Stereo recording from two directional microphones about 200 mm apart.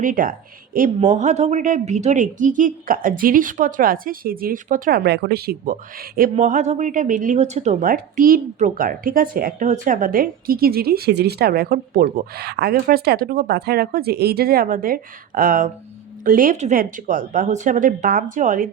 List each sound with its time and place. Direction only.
0.0 s speech: 45° right (ahead or behind)